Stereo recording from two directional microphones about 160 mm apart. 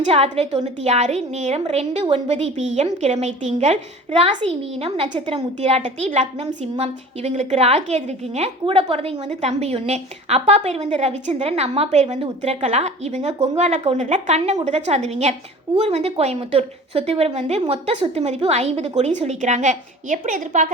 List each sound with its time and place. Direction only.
0.1 s a woman's voice: 40° right (ahead or behind)